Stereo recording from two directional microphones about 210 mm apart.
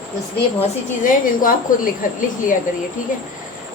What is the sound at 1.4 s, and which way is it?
Speech, 40° left (ahead or behind).